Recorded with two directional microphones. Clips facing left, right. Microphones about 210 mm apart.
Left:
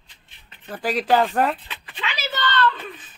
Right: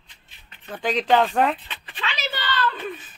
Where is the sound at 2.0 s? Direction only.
10° left (ahead or behind).